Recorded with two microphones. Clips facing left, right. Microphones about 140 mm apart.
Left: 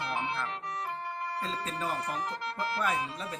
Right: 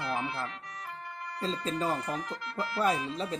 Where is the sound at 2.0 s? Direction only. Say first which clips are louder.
Left 1 dB; 30° left (ahead or behind).